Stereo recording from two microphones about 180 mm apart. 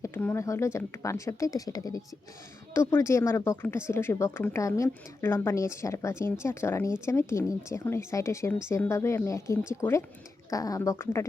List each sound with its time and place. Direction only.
0.0 s speech: 10° left (ahead or behind)